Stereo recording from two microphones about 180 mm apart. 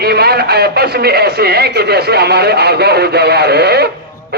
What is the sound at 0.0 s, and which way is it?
A man's voice, 60° right (ahead or behind).